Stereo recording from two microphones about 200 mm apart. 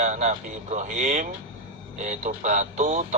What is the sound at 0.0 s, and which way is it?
Speech, 35° right (ahead or behind).